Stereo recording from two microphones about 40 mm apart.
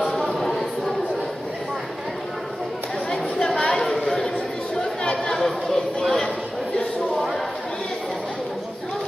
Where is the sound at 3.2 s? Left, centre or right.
Left.